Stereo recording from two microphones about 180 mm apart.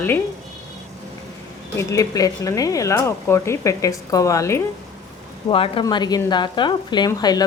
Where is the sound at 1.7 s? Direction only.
20° left (ahead or behind).